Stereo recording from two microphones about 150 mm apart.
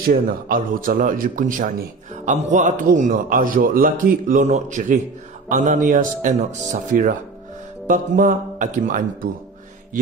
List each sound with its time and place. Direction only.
0.0 s a man's voice: 70° right (ahead or behind)